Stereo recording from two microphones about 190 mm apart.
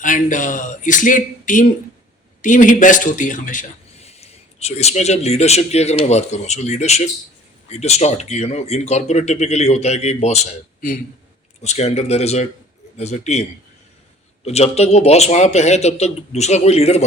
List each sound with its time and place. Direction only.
0.0 s a man's voice: 45° left (ahead or behind)
14.4 s a man's voice: 35° left (ahead or behind)